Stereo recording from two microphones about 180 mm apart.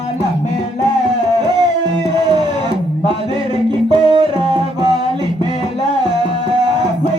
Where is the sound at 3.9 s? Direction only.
25° right (ahead or behind).